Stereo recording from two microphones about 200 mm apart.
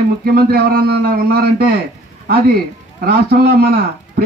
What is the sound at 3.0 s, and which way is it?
Speech, 50° right (ahead or behind).